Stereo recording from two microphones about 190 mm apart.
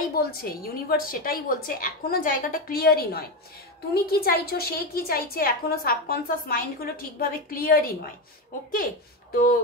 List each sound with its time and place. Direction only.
0.2 s a woman's voice: 50° left (ahead or behind)
9.3 s a woman's voice: 50° left (ahead or behind)